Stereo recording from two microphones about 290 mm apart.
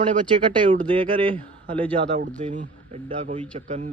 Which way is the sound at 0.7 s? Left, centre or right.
Centre.